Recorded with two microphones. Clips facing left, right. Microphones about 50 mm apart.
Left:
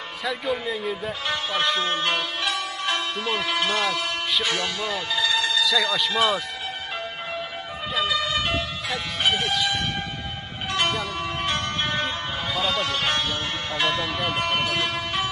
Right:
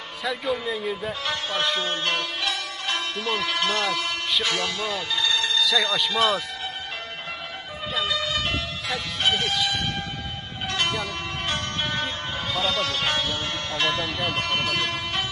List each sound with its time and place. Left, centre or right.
0.2 s speech: centre
3.6 s speech: centre
3.9 s speech: centre
7.9 s vehicle: centre
8.5 s music: centre
9.4 s speech: centre
9.8 s church bell: centre
10.7 s music: centre
12.5 s speech: centre
14.8 s music: centre